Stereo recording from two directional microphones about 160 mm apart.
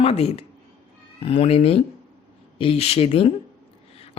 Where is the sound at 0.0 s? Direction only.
40° left (ahead or behind).